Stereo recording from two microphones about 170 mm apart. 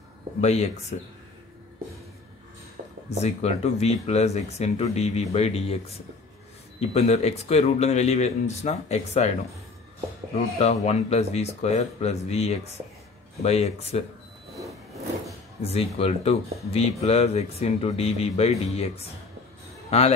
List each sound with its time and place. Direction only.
0.4 s speech: 40° left (ahead or behind)
3.1 s speech: 40° left (ahead or behind)
6.8 s speech: 40° left (ahead or behind)
10.6 s speech: 40° left (ahead or behind)
15.6 s speech: 35° left (ahead or behind)